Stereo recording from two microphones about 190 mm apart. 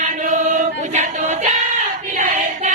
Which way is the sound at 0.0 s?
40° right (ahead or behind).